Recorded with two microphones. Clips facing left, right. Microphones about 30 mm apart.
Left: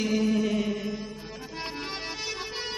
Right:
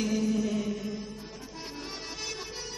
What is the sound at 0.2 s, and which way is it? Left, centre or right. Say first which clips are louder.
Music: left 3 dB; left.